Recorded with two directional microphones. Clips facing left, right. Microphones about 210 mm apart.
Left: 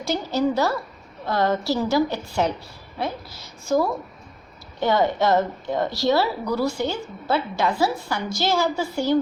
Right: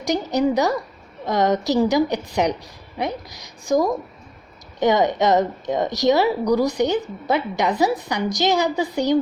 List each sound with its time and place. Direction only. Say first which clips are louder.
0.0 s a woman's voice: right 3 dB; 15° right (ahead or behind)